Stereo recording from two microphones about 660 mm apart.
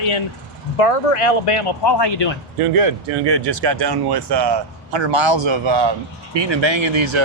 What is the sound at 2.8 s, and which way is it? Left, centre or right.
Speech, right.